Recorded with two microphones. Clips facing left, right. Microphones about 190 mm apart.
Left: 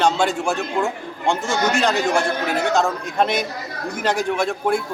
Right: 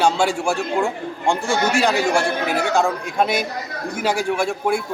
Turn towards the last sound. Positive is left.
turn(degrees=-10)  # may be behind; listen again after turning